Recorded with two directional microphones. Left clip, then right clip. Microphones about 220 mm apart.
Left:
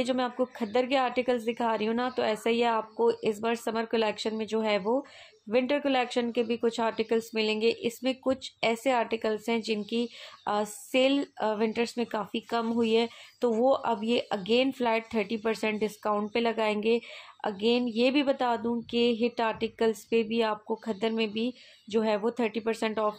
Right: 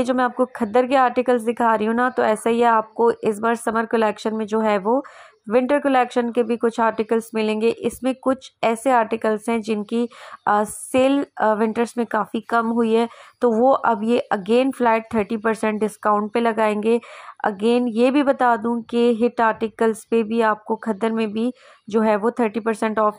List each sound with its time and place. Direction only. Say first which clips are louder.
0.0 s a woman's voice: right 9 dB; 20° right (ahead or behind)